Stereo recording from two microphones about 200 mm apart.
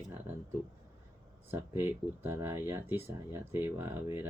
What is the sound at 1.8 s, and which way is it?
Speech, 10° right (ahead or behind).